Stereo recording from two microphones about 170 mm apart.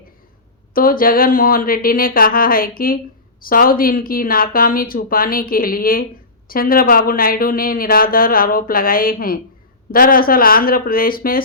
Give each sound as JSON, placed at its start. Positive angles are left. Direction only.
{"t": 0.7, "sound": "speech", "side_deg": 55}